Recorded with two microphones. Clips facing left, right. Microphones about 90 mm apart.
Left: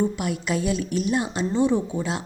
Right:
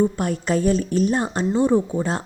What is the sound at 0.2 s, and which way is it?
A woman's voice, 40° right (ahead or behind).